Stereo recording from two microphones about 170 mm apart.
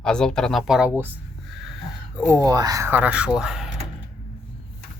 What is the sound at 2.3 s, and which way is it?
Speech, 20° right (ahead or behind).